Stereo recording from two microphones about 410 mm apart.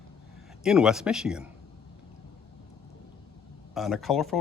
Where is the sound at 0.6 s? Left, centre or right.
Centre.